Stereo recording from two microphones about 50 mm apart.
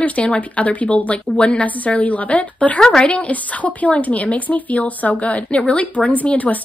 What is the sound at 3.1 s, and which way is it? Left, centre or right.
Speech, left.